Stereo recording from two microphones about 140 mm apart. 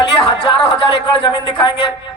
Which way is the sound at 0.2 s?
35° left (ahead or behind).